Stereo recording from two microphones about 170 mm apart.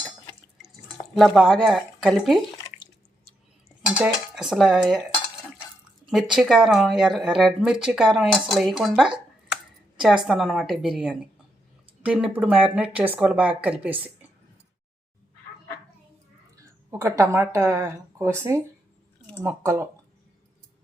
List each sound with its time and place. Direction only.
1.1 s speech: centre (ahead or behind)
4.0 s speech: 5° right (ahead or behind)
6.1 s speech: centre (ahead or behind)
10.2 s speech: centre (ahead or behind)
16.6 s speech: 15° right (ahead or behind)
19.4 s speech: 15° right (ahead or behind)